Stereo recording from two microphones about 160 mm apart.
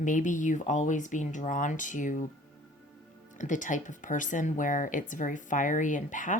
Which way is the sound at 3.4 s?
50° left (ahead or behind).